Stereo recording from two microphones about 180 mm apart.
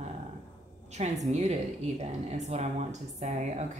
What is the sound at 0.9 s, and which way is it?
Speech, 40° right (ahead or behind).